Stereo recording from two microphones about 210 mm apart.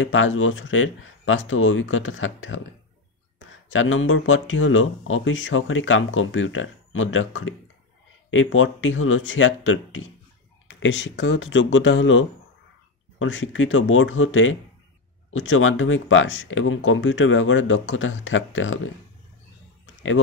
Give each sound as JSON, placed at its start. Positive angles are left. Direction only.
{"t": 0.0, "sound": "speech", "side_deg": 65}